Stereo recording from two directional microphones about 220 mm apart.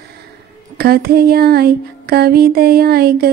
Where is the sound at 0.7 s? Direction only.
45° right (ahead or behind).